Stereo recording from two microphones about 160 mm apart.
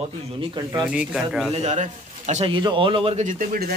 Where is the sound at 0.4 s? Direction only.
25° right (ahead or behind).